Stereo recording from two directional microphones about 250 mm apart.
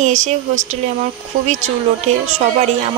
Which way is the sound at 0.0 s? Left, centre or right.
Right.